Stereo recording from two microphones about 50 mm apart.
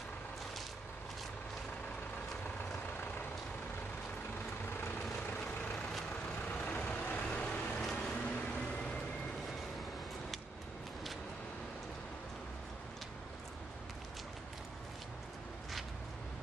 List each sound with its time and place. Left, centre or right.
5.4 s vehicle: centre